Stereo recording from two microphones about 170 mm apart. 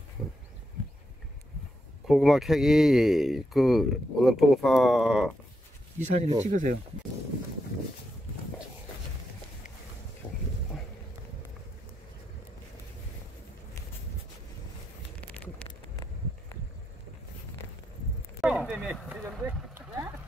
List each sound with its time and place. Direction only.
2.0 s speech: centre (ahead or behind)
5.9 s speech: 40° right (ahead or behind)
18.4 s a sound: 5° right (ahead or behind)